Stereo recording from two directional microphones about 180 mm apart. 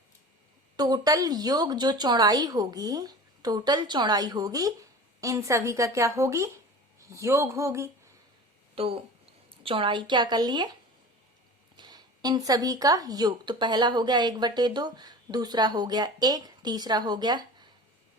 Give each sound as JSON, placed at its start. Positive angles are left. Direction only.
{"t": 0.8, "sound": "speech", "side_deg": -20}
{"t": 8.7, "sound": "speech", "side_deg": -30}
{"t": 11.8, "sound": "speech", "side_deg": -25}